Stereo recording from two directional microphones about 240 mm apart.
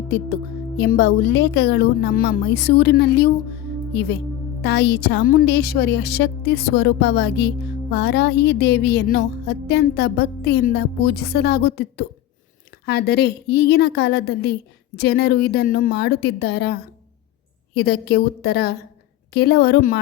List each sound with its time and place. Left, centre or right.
0.8 s a woman's voice: left
4.6 s a woman's voice: left